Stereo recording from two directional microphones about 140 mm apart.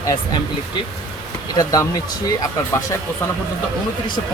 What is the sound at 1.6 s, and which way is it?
Speech, 25° left (ahead or behind).